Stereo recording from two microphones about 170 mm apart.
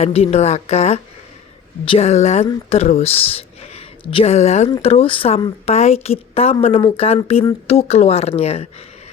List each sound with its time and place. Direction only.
0.0 s speech: 40° left (ahead or behind)